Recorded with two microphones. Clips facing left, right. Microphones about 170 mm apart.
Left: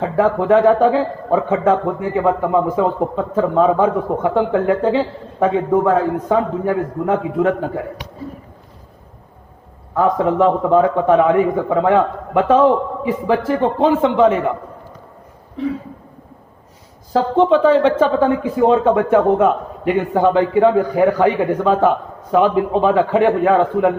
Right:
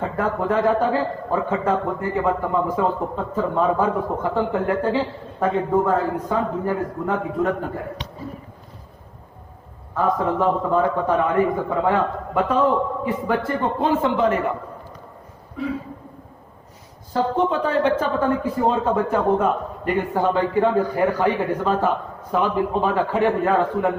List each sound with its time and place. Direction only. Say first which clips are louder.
0.0 s a man's voice: left 7 dB; 90° left
9.9 s a man's voice: left 5 dB; 90° left
17.1 s a man's voice: left 7 dB; 90° left